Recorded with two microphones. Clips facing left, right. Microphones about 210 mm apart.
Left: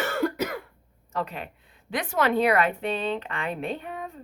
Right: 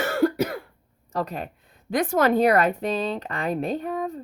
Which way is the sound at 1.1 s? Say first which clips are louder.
Right 3 dB; 40° right (ahead or behind).